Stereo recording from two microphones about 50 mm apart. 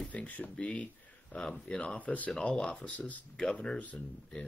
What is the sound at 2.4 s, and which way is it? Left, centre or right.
Speech, centre.